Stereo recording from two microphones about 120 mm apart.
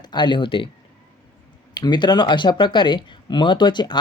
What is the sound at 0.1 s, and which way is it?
Speech, 40° left (ahead or behind).